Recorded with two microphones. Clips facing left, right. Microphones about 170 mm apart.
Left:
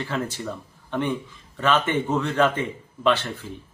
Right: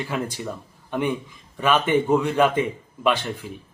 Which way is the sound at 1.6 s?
10° right (ahead or behind).